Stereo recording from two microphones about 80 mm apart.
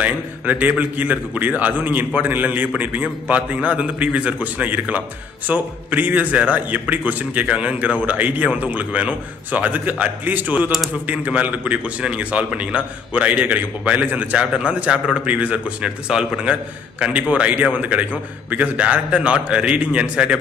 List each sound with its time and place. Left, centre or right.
0.0 s a man's voice: centre